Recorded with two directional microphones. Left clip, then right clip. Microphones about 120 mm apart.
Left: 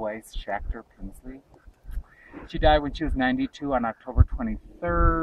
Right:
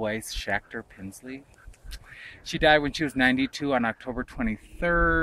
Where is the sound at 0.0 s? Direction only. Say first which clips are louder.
Right 2 dB; 30° right (ahead or behind).